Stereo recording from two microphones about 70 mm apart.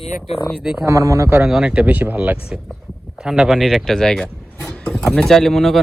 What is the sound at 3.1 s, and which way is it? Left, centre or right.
Speech, centre.